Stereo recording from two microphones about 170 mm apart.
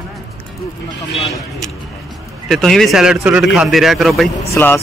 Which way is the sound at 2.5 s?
Centre (ahead or behind).